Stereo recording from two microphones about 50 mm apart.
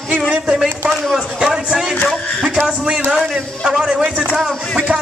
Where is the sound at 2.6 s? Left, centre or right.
Centre.